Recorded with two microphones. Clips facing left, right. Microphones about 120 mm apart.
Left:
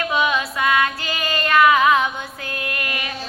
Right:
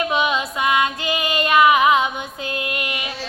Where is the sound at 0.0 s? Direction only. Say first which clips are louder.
Even; 20° right (ahead or behind).